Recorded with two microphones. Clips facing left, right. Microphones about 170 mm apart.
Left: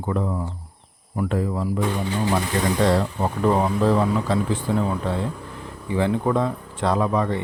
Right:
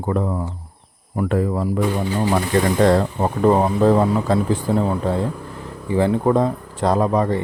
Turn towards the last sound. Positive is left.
turn(degrees=-40)  # may be behind; listen again after turning